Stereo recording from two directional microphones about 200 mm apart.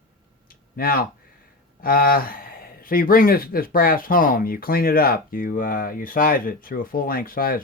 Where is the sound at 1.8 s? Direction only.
45° left (ahead or behind).